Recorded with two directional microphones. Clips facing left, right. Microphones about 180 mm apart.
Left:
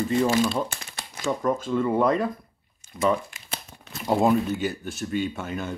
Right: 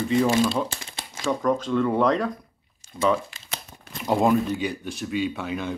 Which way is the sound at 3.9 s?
Centre (ahead or behind).